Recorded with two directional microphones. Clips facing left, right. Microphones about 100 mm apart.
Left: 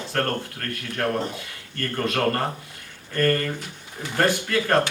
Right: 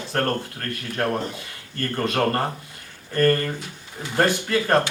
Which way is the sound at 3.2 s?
25° right (ahead or behind).